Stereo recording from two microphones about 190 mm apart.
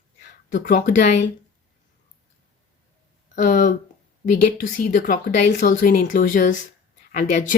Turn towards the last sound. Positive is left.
turn(degrees=40)  # may be behind; listen again after turning